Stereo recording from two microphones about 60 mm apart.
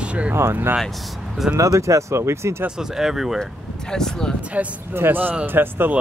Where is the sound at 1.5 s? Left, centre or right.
Right.